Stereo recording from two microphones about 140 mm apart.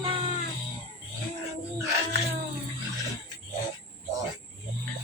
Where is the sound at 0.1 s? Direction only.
40° right (ahead or behind).